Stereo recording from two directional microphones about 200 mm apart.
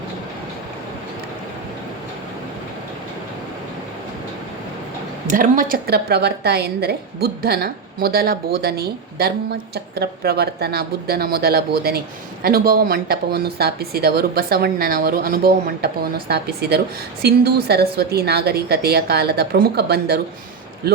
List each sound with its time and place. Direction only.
5.3 s a woman's voice: 45° right (ahead or behind)